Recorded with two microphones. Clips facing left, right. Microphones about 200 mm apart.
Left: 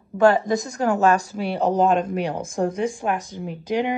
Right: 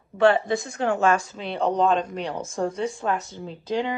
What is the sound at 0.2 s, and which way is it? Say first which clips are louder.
Speech: left 2 dB; 40° left (ahead or behind).